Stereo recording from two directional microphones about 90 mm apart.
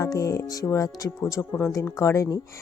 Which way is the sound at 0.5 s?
40° left (ahead or behind).